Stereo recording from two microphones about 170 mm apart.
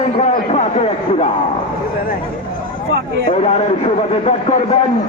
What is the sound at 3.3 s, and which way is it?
A man's voice, 35° left (ahead or behind).